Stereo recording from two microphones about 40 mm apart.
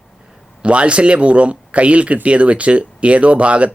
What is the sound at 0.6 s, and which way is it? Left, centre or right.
Speech, right.